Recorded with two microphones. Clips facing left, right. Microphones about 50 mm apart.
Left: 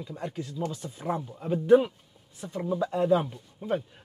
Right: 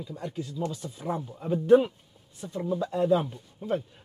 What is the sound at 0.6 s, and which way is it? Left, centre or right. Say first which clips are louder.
Speech: even; left.